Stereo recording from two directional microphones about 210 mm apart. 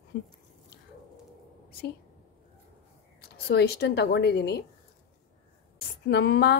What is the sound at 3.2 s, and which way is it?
Speech, 50° left (ahead or behind).